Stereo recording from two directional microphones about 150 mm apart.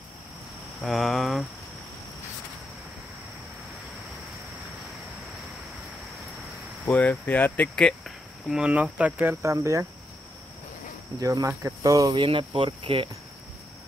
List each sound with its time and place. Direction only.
0.8 s speech: centre (ahead or behind)
6.9 s speech: 10° left (ahead or behind)
8.5 s speech: 5° right (ahead or behind)
11.1 s speech: 20° right (ahead or behind)